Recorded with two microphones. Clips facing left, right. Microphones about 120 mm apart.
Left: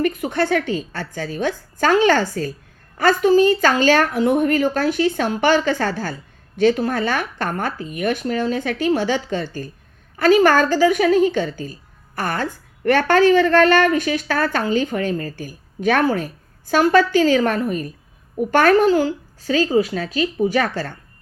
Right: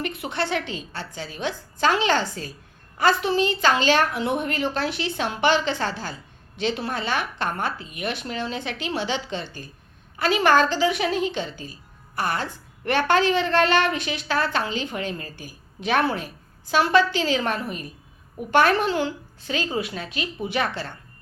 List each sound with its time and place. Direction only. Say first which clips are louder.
0.0 s a woman's voice: left 8 dB; 45° left (ahead or behind)